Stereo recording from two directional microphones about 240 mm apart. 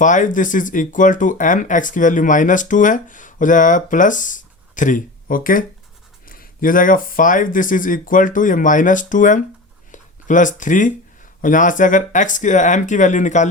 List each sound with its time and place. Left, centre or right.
0.0 s speech: left